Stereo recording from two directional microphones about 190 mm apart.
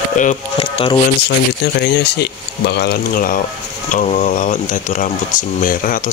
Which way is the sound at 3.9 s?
35° left (ahead or behind).